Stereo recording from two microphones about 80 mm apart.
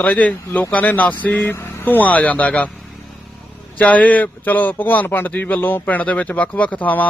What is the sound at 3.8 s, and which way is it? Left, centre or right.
A man's voice, centre.